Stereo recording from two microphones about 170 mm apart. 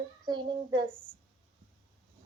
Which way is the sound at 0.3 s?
25° right (ahead or behind).